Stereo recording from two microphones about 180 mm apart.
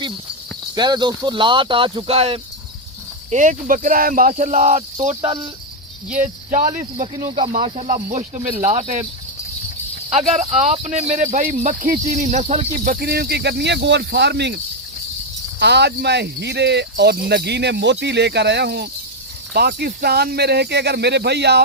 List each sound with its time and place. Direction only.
0.8 s speech: 25° right (ahead or behind)
3.2 s speech: 45° right (ahead or behind)
5.0 s speech: 30° right (ahead or behind)
6.1 s speech: 45° right (ahead or behind)
10.1 s speech: 40° right (ahead or behind); by 21.6 s 65° right (ahead or behind)